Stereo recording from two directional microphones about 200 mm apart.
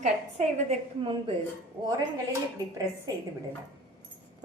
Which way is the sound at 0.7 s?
25° right (ahead or behind).